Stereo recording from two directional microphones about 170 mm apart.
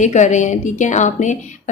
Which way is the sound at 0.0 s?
45° left (ahead or behind).